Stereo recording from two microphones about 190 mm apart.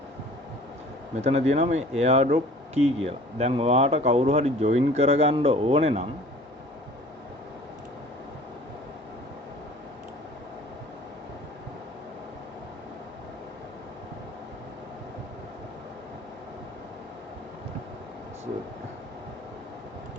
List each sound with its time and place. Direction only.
1.2 s speech: 35° right (ahead or behind)